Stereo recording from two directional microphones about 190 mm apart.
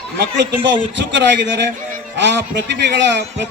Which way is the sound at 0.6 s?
70° right (ahead or behind).